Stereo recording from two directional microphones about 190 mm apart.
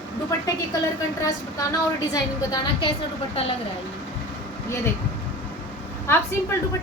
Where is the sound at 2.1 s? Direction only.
20° left (ahead or behind).